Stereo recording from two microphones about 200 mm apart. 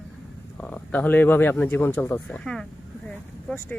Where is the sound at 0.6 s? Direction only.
5° left (ahead or behind).